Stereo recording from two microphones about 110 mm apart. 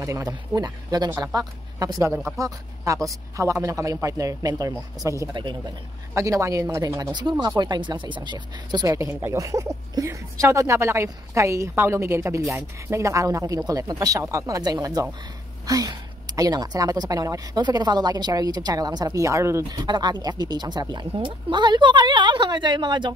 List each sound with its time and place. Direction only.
0.0 s a woman's voice: 30° right (ahead or behind)
5.3 s speech: 45° right (ahead or behind)
6.1 s speech: 30° right (ahead or behind)
7.0 s speech: 45° right (ahead or behind)
8.8 s a woman's voice: 25° right (ahead or behind)
19.7 s speech: 40° right (ahead or behind)